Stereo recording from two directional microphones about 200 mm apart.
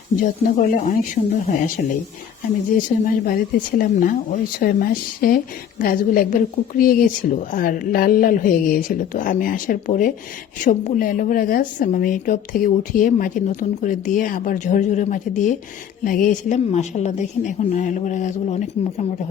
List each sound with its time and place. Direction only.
0.2 s a woman's voice: 40° left (ahead or behind)
2.7 s a woman's voice: 40° left (ahead or behind)